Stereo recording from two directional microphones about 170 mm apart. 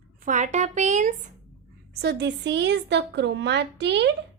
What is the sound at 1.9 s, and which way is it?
Speech, 75° right (ahead or behind).